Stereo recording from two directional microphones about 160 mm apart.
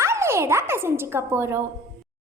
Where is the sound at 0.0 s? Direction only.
15° right (ahead or behind).